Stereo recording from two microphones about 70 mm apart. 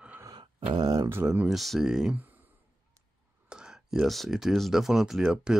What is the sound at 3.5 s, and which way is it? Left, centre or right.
Speech, centre.